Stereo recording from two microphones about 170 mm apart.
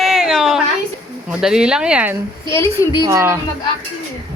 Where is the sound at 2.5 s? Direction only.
15° left (ahead or behind).